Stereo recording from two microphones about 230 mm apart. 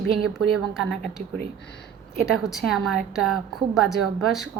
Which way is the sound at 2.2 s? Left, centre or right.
Centre.